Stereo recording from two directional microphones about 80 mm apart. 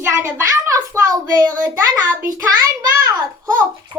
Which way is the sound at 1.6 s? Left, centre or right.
Right.